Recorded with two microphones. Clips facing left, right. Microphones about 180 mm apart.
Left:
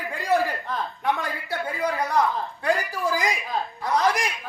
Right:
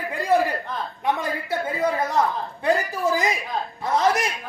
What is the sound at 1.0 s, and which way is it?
Speech, 20° right (ahead or behind).